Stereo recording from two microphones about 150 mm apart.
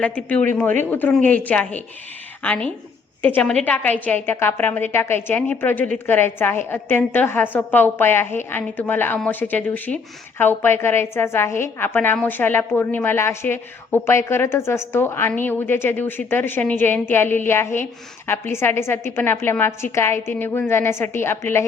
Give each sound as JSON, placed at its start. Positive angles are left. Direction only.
{"t": 0.0, "sound": "a woman's voice", "side_deg": 10}